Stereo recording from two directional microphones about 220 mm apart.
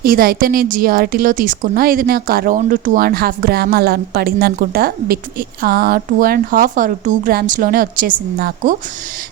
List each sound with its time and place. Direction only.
0.0 s speech: 40° right (ahead or behind)